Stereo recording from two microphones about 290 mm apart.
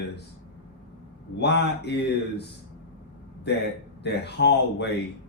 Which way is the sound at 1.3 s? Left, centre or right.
Left.